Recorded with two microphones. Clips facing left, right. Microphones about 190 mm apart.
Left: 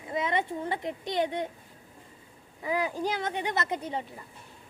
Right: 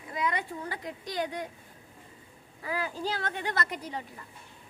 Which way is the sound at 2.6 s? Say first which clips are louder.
Left 4 dB; 20° left (ahead or behind).